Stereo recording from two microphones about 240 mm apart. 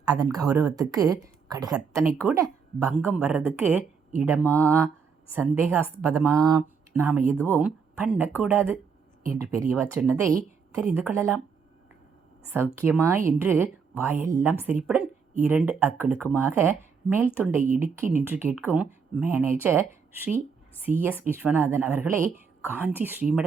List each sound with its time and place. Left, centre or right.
0.0 s a woman's voice: centre
7.3 s speech: centre
7.6 s a woman's voice: centre
12.5 s a woman's voice: centre